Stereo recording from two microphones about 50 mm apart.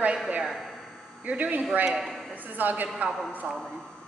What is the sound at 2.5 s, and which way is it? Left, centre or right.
Speech, right.